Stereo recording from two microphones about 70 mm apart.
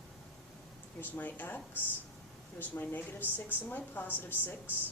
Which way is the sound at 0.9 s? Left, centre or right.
Left.